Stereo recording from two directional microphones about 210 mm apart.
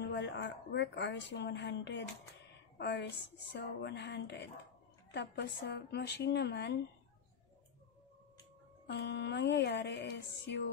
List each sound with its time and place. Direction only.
0.0 s a woman's voice: 55° left (ahead or behind)
8.8 s speech: 55° left (ahead or behind)